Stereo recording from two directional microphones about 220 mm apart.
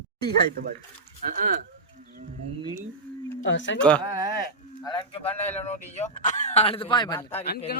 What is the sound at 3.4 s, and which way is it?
Speech, 55° left (ahead or behind).